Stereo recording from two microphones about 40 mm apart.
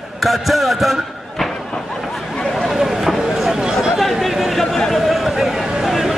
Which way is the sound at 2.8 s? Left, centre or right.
Centre.